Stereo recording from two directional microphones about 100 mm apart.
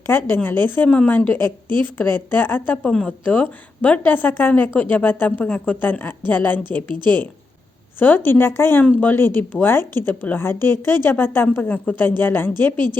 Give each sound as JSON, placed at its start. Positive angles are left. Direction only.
{"t": 0.1, "sound": "a woman's voice", "side_deg": 20}
{"t": 2.9, "sound": "a woman's voice", "side_deg": 5}
{"t": 3.2, "sound": "a woman's voice", "side_deg": 15}
{"t": 7.9, "sound": "a woman's voice", "side_deg": 20}